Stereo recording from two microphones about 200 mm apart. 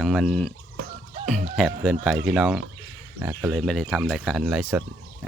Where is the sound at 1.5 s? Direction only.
Centre (ahead or behind).